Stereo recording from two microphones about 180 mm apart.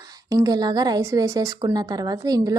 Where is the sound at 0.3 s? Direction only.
20° right (ahead or behind).